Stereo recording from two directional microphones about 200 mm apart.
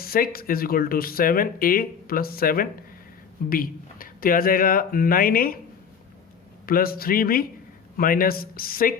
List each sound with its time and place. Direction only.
0.0 s speech: 50° left (ahead or behind)
6.7 s speech: 50° left (ahead or behind)